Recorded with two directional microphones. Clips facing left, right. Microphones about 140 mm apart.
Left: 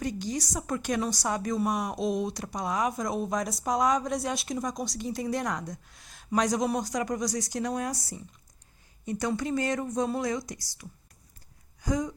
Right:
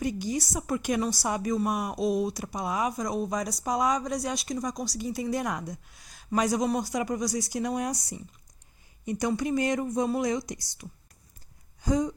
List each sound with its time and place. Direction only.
0.0 s a woman's voice: 10° right (ahead or behind)
7.8 s speech: 20° right (ahead or behind)
11.8 s a sound: 25° right (ahead or behind)